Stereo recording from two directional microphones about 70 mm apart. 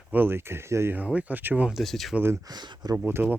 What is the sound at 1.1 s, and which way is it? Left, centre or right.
Speech, right.